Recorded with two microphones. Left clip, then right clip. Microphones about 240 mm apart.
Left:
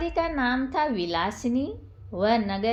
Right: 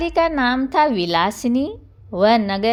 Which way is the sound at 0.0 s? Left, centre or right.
Right.